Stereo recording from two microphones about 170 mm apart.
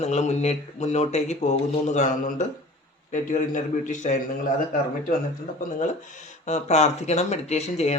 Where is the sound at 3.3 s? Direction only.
50° left (ahead or behind).